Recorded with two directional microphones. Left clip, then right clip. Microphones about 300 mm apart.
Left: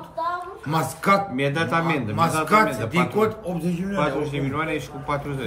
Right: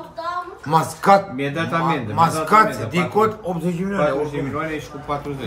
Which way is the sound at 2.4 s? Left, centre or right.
Centre.